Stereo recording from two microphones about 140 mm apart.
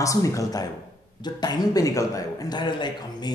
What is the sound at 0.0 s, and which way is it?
A man's voice, 25° left (ahead or behind).